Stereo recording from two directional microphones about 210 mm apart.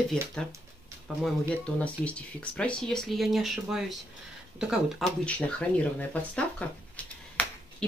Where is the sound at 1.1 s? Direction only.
Centre (ahead or behind).